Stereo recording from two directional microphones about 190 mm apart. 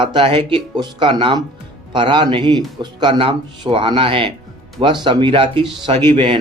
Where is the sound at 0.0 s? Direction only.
25° right (ahead or behind).